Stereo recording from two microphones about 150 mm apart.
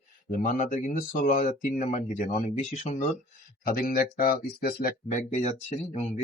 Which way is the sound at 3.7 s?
75° left (ahead or behind).